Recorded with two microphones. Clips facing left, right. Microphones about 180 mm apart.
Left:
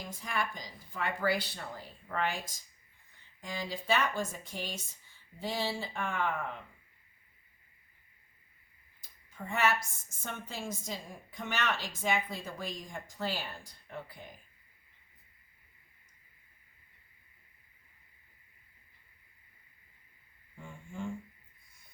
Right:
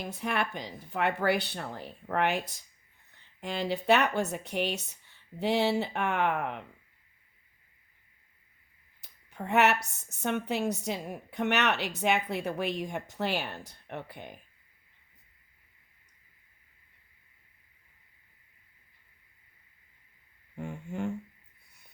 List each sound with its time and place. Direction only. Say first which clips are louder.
0.0 s speech: right 5 dB; 65° right (ahead or behind)
9.0 s speech: right 5 dB; 70° right (ahead or behind)
20.6 s a sound: right 7 dB; 70° right (ahead or behind)